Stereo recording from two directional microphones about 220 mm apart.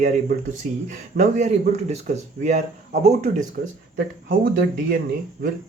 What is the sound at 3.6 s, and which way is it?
Speech, 45° right (ahead or behind).